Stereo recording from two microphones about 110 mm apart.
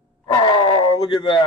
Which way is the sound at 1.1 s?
50° left (ahead or behind).